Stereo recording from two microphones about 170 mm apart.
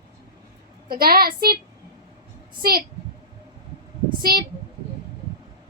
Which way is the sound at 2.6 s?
65° right (ahead or behind).